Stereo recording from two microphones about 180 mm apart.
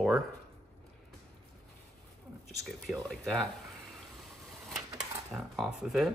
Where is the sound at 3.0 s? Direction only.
5° left (ahead or behind).